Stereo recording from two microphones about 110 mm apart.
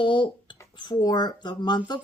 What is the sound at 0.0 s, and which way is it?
Speech, 45° left (ahead or behind).